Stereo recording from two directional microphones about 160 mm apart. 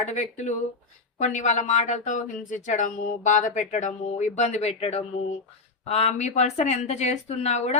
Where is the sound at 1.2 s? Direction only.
50° left (ahead or behind).